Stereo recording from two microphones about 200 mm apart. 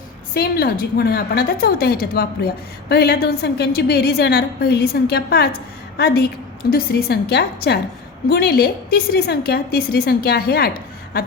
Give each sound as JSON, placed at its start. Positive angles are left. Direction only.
{"t": 0.3, "sound": "a woman's voice", "side_deg": 50}